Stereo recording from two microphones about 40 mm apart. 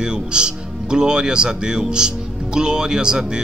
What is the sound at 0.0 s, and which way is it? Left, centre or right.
Speech, right.